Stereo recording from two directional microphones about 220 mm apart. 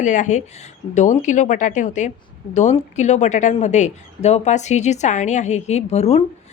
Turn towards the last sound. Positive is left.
turn(degrees=30)  # may be behind; listen again after turning